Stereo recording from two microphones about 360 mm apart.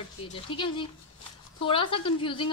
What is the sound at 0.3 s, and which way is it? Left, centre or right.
A woman's voice, centre.